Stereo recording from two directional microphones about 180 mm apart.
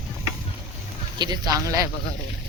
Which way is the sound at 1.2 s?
20° right (ahead or behind).